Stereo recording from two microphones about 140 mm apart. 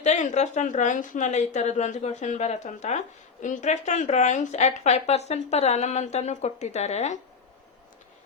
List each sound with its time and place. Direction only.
0.0 s speech: 55° left (ahead or behind)